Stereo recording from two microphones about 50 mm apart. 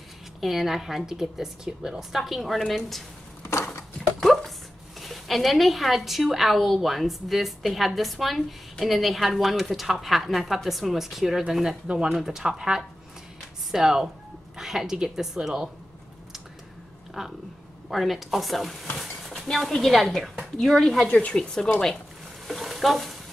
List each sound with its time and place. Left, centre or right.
0.4 s a woman's voice: centre
3.4 s a sound: left
4.2 s a sound: centre
5.0 s a woman's voice: centre
17.2 s a woman's voice: centre
21.1 s speech: left
22.5 s stir: centre